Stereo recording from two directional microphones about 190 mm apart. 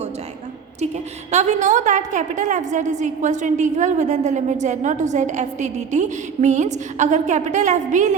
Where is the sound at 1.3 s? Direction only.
35° right (ahead or behind).